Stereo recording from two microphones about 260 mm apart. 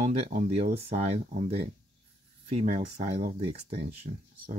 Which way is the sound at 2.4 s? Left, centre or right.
Right.